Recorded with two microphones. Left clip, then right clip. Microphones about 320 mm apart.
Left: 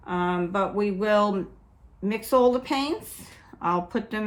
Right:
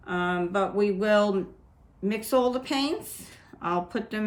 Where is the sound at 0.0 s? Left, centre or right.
Centre.